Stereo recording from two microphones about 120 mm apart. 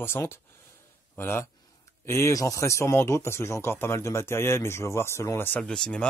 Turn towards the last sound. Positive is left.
turn(degrees=5)  # may be behind; listen again after turning